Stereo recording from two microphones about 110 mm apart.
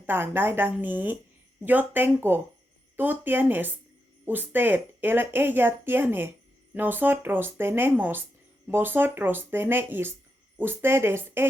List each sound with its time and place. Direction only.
0.0 s speech: 20° right (ahead or behind)